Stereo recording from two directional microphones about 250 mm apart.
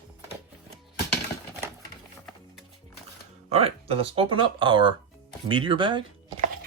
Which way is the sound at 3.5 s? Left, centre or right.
Right.